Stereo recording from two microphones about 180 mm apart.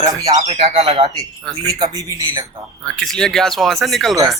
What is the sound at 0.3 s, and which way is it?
Speech, 40° right (ahead or behind).